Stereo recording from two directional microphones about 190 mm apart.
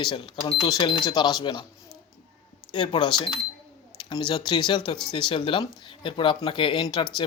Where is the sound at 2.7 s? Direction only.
25° left (ahead or behind).